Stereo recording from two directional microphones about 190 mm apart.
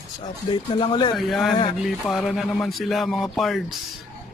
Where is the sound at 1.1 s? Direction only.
Centre (ahead or behind).